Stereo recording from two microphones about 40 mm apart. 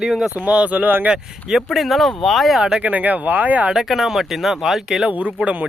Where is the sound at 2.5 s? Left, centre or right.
Centre.